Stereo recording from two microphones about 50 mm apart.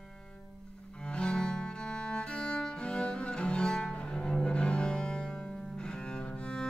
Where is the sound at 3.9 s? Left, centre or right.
Centre.